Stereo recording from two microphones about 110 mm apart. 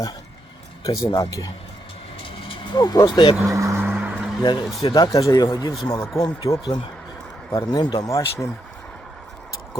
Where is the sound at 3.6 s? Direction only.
25° right (ahead or behind).